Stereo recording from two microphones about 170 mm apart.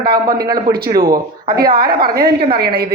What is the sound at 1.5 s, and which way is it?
A woman's voice, 65° right (ahead or behind).